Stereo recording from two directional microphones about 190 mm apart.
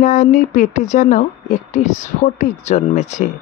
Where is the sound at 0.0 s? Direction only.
40° left (ahead or behind).